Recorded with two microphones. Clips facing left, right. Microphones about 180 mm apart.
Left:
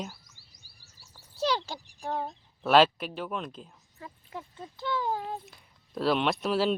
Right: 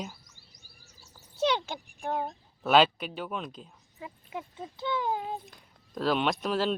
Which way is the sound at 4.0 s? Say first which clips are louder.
Right 3 dB; 10° right (ahead or behind).